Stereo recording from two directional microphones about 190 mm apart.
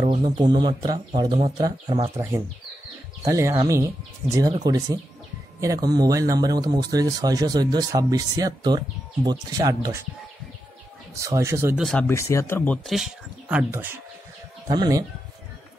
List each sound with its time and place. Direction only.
0.0 s speech: 35° right (ahead or behind)
0.4 s speech: 25° right (ahead or behind)
2.1 s speech: 15° right (ahead or behind)
11.1 s speech: 15° right (ahead or behind)
11.8 s speech: 5° left (ahead or behind)
12.1 s speech: 15° left (ahead or behind); by 13.8 s 10° right (ahead or behind)
14.7 s speech: 20° right (ahead or behind)